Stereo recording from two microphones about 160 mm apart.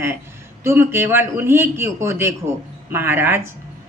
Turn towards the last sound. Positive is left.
turn(degrees=-15)  # may be behind; listen again after turning